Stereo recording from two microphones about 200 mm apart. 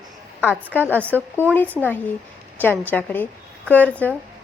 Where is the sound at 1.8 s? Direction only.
10° right (ahead or behind).